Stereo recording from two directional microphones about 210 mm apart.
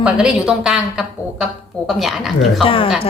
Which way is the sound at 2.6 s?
25° left (ahead or behind).